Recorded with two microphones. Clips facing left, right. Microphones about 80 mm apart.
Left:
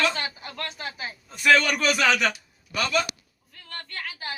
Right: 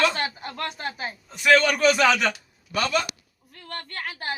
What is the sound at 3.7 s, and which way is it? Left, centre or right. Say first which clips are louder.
Speech: right 3 dB; right.